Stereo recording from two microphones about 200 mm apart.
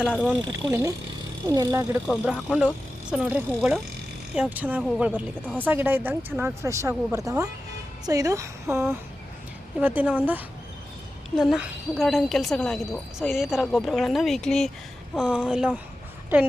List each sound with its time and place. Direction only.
0.6 s speech: 15° right (ahead or behind)